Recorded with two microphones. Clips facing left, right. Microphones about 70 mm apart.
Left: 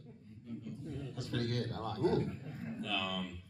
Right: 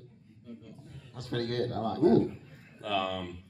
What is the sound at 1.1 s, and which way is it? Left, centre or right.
A man's voice, right.